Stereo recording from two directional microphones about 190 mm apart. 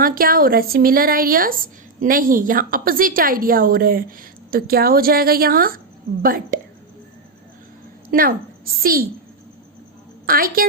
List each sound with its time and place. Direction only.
0.0 s a woman's voice: 50° right (ahead or behind)
8.1 s a woman's voice: 50° right (ahead or behind)
10.2 s a woman's voice: 50° right (ahead or behind)